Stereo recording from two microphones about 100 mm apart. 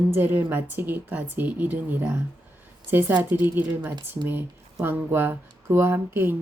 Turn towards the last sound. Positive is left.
turn(degrees=-20)  # may be behind; listen again after turning